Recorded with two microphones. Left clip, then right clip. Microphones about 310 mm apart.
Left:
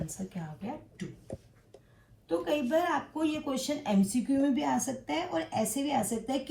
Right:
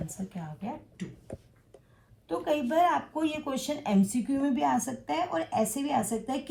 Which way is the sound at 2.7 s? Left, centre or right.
Centre.